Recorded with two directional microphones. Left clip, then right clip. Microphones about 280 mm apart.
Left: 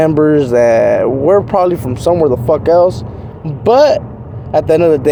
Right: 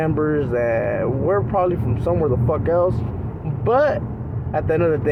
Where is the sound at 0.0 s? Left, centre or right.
Left.